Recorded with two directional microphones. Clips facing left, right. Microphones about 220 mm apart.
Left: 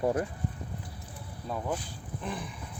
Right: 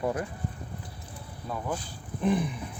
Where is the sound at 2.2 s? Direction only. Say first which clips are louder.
Right 12 dB; 20° right (ahead or behind).